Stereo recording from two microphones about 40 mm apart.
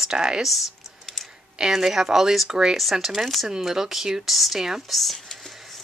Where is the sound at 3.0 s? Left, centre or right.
Centre.